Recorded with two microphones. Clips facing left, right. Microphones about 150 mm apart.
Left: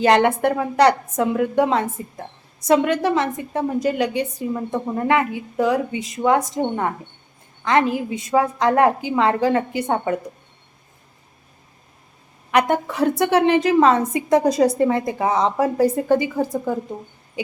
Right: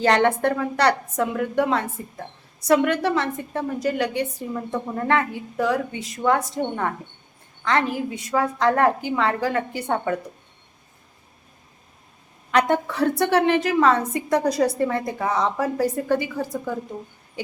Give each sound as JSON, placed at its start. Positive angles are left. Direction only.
{"t": 0.0, "sound": "a woman's voice", "side_deg": 15}
{"t": 12.5, "sound": "a woman's voice", "side_deg": 15}